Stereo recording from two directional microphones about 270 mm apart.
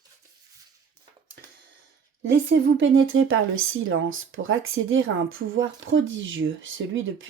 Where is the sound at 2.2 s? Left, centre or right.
Right.